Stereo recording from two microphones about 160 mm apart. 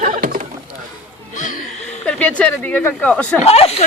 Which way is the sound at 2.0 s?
5° left (ahead or behind).